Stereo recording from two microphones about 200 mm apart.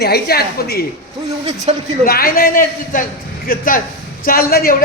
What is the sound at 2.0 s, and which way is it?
A man's voice, 45° left (ahead or behind).